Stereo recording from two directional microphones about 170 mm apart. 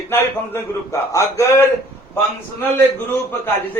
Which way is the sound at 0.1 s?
15° left (ahead or behind).